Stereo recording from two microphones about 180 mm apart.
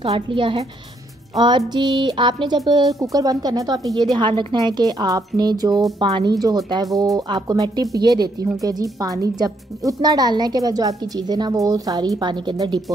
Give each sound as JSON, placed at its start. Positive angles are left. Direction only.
{"t": 0.0, "sound": "a woman's voice", "side_deg": -30}
{"t": 1.7, "sound": "speech", "side_deg": -25}